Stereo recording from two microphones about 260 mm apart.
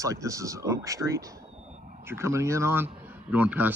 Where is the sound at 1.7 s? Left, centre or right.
Right.